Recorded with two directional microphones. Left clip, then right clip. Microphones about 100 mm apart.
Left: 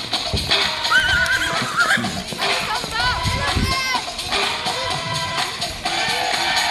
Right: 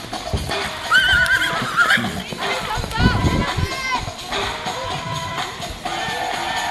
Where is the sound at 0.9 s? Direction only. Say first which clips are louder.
Right 3 dB; centre (ahead or behind).